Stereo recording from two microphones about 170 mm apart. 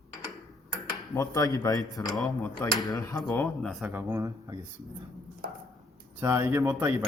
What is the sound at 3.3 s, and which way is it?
Speech, 10° left (ahead or behind).